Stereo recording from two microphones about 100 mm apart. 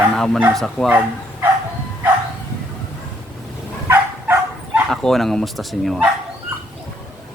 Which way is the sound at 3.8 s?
25° right (ahead or behind).